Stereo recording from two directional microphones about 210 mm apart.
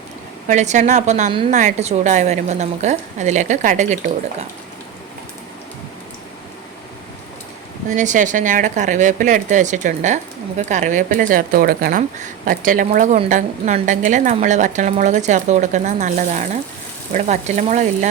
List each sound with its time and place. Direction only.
0.4 s a woman's voice: 35° right (ahead or behind)
7.9 s a woman's voice: 35° right (ahead or behind)